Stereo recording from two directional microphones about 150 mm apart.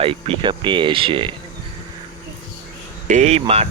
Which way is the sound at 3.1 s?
50° right (ahead or behind).